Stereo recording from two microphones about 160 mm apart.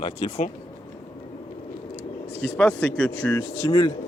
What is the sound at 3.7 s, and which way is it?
Speech, 25° left (ahead or behind).